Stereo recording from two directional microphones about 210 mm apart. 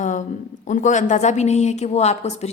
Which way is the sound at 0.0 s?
35° left (ahead or behind).